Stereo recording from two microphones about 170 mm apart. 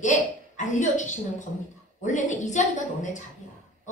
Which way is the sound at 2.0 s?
45° left (ahead or behind).